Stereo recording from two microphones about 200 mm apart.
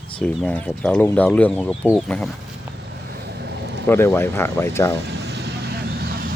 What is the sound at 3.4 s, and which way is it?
Vehicle, 55° right (ahead or behind).